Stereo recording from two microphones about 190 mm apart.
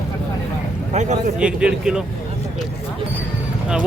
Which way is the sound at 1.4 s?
5° right (ahead or behind).